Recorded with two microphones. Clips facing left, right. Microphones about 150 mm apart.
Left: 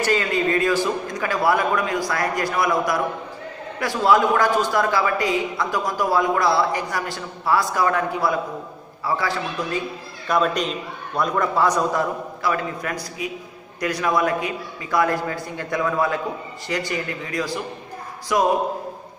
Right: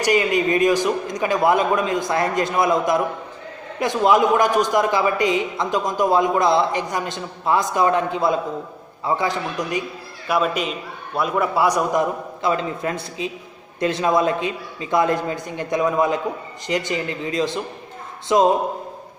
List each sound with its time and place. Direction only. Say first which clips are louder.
0.0 s a man's voice: right 2 dB; 15° right (ahead or behind)